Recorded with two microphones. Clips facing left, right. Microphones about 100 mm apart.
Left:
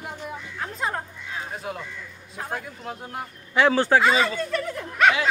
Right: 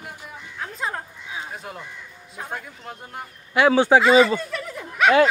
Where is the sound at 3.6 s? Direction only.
10° right (ahead or behind).